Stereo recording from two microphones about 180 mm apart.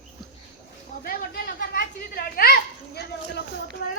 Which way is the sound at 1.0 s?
55° left (ahead or behind).